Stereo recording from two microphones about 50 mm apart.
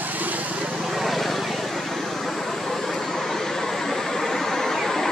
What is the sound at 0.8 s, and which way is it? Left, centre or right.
Vehicle, centre.